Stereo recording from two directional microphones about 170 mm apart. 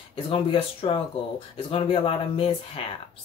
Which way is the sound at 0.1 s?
30° left (ahead or behind).